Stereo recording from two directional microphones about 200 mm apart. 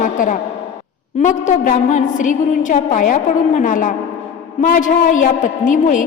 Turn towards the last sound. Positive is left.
turn(degrees=40)  # may be behind; listen again after turning